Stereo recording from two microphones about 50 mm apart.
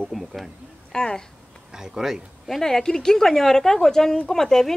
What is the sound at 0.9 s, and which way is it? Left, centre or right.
Speech, centre.